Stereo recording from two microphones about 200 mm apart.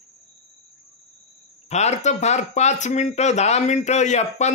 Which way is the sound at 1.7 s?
35° left (ahead or behind).